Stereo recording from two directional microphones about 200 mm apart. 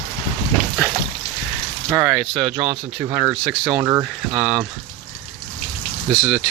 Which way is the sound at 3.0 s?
15° right (ahead or behind).